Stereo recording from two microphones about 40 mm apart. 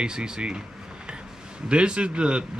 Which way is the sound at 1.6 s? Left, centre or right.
Right.